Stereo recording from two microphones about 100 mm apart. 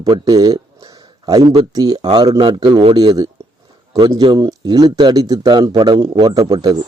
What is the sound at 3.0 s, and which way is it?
Speech, 40° right (ahead or behind).